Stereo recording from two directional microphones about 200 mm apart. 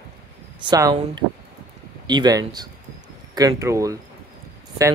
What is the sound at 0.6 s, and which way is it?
Speech, 20° right (ahead or behind).